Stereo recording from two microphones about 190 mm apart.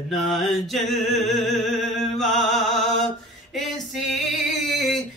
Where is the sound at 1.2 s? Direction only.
40° left (ahead or behind).